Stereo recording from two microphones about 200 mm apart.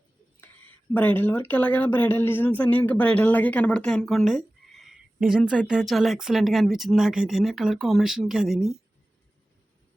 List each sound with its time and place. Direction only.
0.9 s speech: 10° left (ahead or behind)